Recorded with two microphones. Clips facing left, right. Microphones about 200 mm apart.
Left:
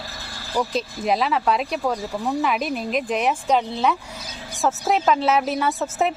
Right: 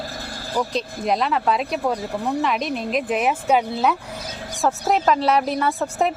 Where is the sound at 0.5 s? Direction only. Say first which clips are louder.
Even; centre (ahead or behind).